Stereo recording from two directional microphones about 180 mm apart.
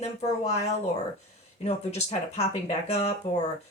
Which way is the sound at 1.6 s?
35° left (ahead or behind).